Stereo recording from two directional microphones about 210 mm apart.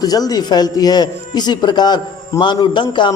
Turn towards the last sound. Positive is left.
turn(degrees=20)  # may be behind; listen again after turning